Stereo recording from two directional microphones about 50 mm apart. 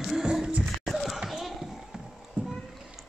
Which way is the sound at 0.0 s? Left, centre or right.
Centre.